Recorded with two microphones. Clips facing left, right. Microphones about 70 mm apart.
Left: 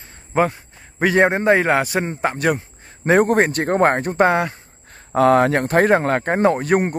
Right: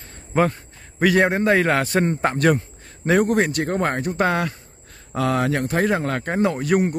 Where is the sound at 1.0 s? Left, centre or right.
Left; by 2.6 s centre.